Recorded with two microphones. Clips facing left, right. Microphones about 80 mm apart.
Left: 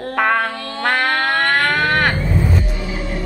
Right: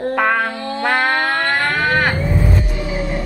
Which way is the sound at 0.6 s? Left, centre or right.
Centre.